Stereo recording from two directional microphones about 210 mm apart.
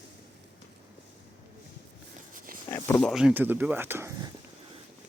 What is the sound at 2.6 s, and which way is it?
Speech, 10° left (ahead or behind).